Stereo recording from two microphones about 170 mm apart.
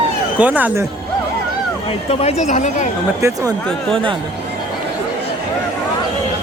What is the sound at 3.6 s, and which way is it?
Speech, 5° left (ahead or behind).